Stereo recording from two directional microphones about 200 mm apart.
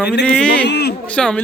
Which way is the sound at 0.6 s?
55° left (ahead or behind).